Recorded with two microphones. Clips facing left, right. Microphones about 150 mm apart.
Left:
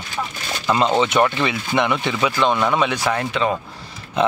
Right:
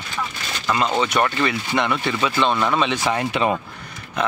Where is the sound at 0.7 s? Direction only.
25° left (ahead or behind).